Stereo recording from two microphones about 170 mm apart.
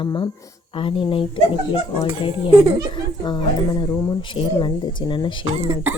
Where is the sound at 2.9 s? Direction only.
30° left (ahead or behind).